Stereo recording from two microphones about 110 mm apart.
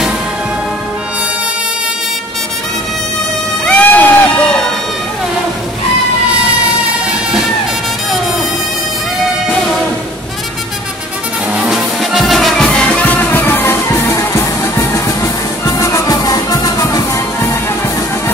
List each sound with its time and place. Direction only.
3.6 s crowd: 15° left (ahead or behind)
11.5 s music: 5° right (ahead or behind); by 17.6 s 30° left (ahead or behind)